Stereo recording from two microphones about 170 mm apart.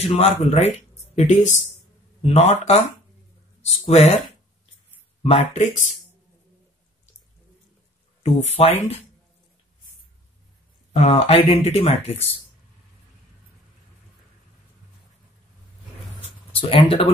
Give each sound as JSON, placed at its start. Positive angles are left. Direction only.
{"t": 0.0, "sound": "speech", "side_deg": 40}
{"t": 5.2, "sound": "speech", "side_deg": 35}
{"t": 8.2, "sound": "speech", "side_deg": 40}
{"t": 10.9, "sound": "speech", "side_deg": 40}
{"t": 16.5, "sound": "speech", "side_deg": 35}